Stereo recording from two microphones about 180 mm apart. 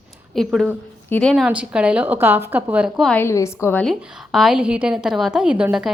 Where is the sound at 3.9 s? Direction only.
Centre (ahead or behind).